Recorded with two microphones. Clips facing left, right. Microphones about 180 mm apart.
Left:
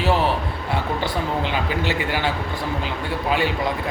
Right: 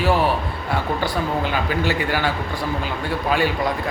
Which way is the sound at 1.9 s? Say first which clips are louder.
Right 2 dB; 20° left (ahead or behind).